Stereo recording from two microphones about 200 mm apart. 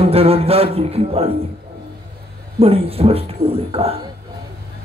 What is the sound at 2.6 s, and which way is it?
A man's voice, 30° right (ahead or behind).